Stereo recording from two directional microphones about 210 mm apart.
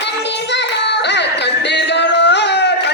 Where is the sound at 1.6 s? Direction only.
55° left (ahead or behind).